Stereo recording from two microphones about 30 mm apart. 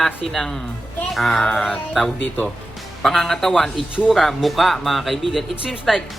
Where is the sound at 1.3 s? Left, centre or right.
Left.